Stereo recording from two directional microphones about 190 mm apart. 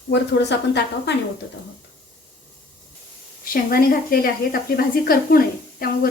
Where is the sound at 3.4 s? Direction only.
50° left (ahead or behind).